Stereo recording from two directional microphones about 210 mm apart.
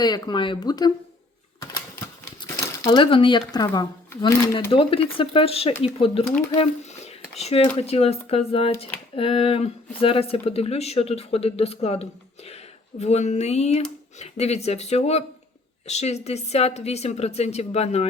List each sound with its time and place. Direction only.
0.0 s speech: 20° left (ahead or behind)
2.4 s speech: 20° left (ahead or behind)
4.7 s a woman's voice: 25° left (ahead or behind)